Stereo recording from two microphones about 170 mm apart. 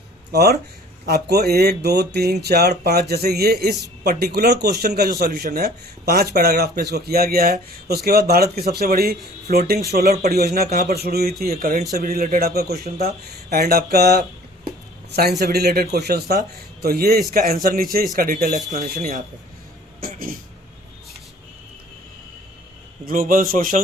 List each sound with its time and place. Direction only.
0.3 s a man's voice: 70° right (ahead or behind)
15.5 s a man's voice: 65° right (ahead or behind); by 19.2 s 50° right (ahead or behind)
20.0 s speech: 60° right (ahead or behind)
23.0 s a man's voice: 55° right (ahead or behind)